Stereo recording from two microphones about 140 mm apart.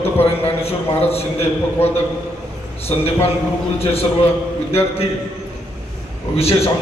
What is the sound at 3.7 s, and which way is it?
A man's voice, 45° left (ahead or behind).